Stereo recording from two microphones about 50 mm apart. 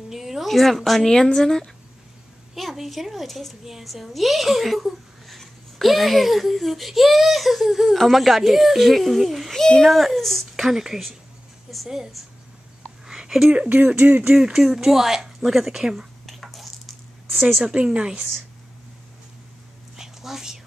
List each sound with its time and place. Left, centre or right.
0.1 s a woman's voice: centre
2.5 s a woman's voice: centre
9.6 s speech: centre
9.8 s a woman's voice: centre
10.5 s a woman's voice: centre
13.0 s a sound: centre
13.5 s speech: right
14.2 s speech: centre
16.3 s squish: centre
17.6 s a woman's voice: right
20.0 s a sound: centre